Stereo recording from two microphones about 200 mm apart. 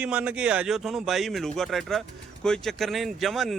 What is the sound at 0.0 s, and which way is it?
Speech, 5° right (ahead or behind).